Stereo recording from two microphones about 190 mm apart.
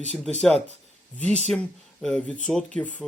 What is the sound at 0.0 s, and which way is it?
Speech, 35° right (ahead or behind).